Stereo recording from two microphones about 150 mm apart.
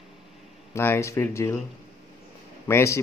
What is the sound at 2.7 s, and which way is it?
Speech, 20° left (ahead or behind).